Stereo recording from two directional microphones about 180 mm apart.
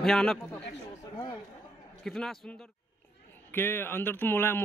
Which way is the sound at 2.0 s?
Centre (ahead or behind).